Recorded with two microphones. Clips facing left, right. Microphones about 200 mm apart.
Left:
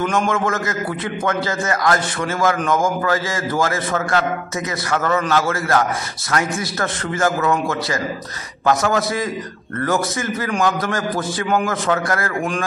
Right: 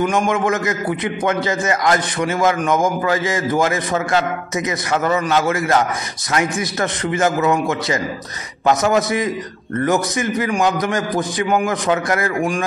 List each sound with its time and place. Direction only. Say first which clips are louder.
0.0 s a man's voice: right 2 dB; 15° right (ahead or behind)